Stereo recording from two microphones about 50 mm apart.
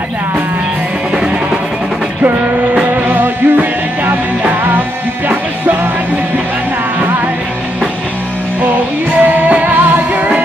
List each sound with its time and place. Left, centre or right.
1.1 s music: centre
2.7 s music: right
9.2 s music: right